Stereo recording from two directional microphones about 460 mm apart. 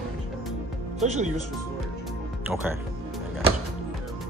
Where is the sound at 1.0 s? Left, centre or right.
Centre.